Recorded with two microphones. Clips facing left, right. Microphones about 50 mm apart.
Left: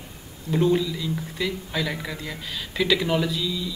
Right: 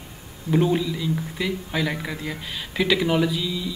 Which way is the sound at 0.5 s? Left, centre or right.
Centre.